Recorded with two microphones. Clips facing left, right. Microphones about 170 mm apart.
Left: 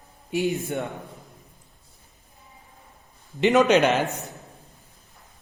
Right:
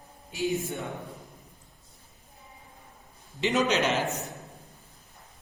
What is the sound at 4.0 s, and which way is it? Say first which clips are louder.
Speech: left 3 dB; centre (ahead or behind).